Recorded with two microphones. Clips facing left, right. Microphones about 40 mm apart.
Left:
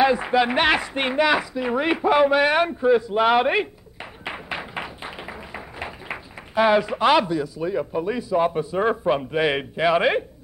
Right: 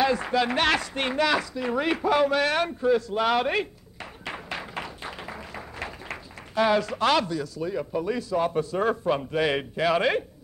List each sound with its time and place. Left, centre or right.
0.0 s speech: centre